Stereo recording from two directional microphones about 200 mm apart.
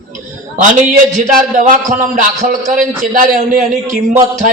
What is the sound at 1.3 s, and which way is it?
A man's voice, 40° right (ahead or behind).